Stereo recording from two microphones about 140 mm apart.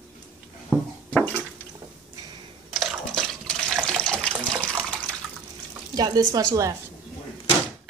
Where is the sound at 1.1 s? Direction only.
10° left (ahead or behind).